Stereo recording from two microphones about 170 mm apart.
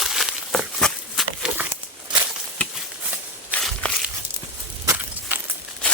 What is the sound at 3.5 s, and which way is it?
Walk, 10° right (ahead or behind).